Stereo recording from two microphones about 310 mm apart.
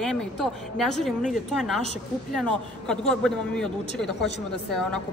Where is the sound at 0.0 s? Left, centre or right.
Centre.